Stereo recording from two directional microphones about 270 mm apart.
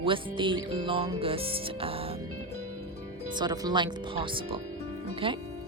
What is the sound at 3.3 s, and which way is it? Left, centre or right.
Speech, centre.